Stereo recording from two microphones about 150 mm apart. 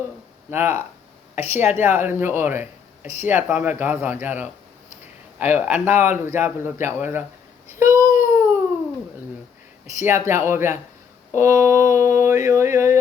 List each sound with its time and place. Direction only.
0.5 s speech: 15° right (ahead or behind)
7.8 s babbling: 15° right (ahead or behind)
10.0 s speech: 15° right (ahead or behind)
11.3 s a sound: 20° right (ahead or behind)